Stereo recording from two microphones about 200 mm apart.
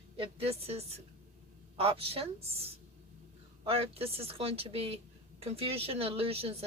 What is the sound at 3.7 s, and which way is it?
Speech, 30° right (ahead or behind).